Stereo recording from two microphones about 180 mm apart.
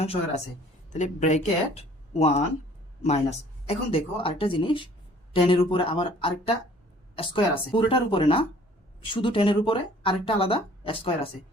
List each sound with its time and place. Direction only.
0.0 s speech: 35° left (ahead or behind)